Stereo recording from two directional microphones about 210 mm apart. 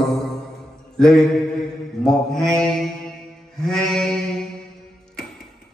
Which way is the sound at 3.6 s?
Centre (ahead or behind).